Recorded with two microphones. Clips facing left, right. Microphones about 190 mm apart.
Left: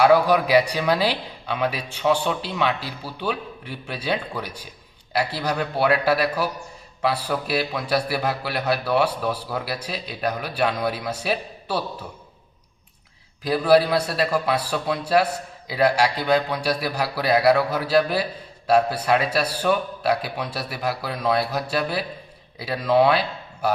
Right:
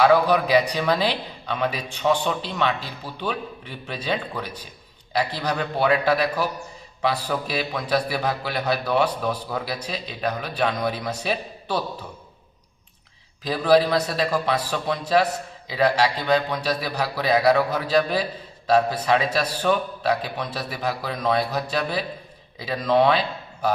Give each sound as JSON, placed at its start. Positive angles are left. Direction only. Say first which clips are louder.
{"t": 0.0, "sound": "a man's voice", "louder": "left 1 dB", "side_deg": 10}
{"t": 13.4, "sound": "a man's voice", "louder": "left 1 dB", "side_deg": 5}